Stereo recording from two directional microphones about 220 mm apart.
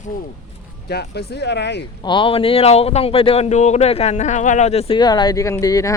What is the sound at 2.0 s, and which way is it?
Speech, 20° left (ahead or behind).